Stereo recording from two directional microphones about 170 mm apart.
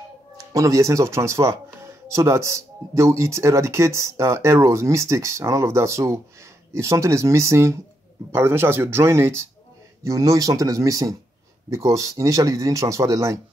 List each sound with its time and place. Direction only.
0.4 s speech: 20° right (ahead or behind)